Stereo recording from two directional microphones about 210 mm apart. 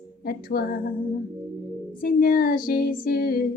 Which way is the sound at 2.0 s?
40° left (ahead or behind).